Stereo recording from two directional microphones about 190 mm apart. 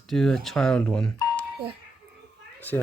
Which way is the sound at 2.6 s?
10° left (ahead or behind).